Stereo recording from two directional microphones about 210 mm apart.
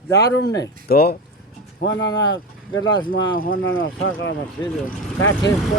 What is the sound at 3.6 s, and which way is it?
Speech, 70° left (ahead or behind).